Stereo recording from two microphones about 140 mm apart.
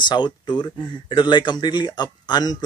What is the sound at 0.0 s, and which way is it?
A man's voice, 35° left (ahead or behind).